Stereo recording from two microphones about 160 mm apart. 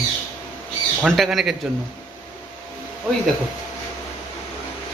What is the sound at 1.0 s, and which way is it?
Speech, centre (ahead or behind).